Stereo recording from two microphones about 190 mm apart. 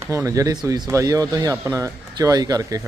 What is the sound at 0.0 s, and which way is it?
Speech, 15° right (ahead or behind).